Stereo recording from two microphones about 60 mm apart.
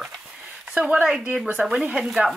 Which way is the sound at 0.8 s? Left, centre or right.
Centre.